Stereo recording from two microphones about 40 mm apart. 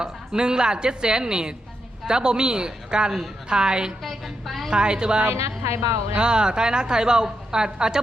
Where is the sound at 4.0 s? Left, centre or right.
Centre.